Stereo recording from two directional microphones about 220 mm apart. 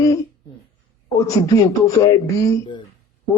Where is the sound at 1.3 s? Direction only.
15° left (ahead or behind).